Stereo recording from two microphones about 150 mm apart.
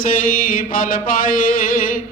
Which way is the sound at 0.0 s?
65° left (ahead or behind).